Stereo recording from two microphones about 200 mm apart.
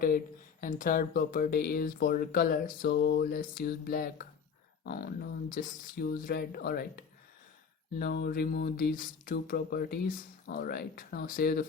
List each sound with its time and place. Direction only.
0.6 s speech: 40° left (ahead or behind)